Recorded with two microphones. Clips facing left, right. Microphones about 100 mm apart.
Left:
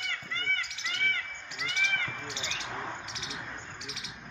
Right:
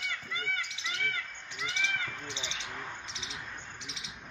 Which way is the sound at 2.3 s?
25° right (ahead or behind).